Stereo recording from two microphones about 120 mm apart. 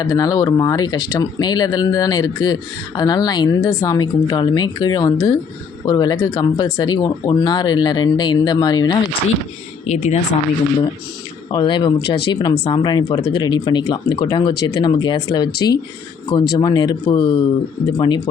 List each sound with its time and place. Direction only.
0.0 s speech: 30° left (ahead or behind)
9.8 s speech: 70° left (ahead or behind)
11.5 s speech: 40° left (ahead or behind)